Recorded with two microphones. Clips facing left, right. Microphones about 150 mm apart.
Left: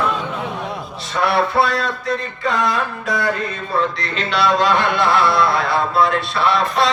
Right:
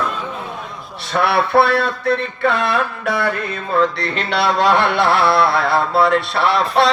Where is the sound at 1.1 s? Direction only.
65° right (ahead or behind).